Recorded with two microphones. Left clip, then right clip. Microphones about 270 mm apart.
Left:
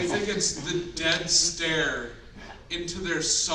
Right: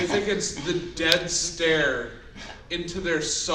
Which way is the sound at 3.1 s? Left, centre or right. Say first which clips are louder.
Even; left.